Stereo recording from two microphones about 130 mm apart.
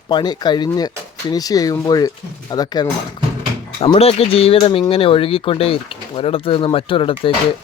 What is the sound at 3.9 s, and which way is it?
Speech, 50° left (ahead or behind).